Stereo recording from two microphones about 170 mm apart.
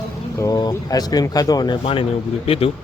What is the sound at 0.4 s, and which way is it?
Speech, 20° left (ahead or behind).